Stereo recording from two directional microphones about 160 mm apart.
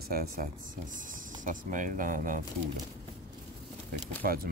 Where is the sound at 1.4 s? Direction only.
55° right (ahead or behind).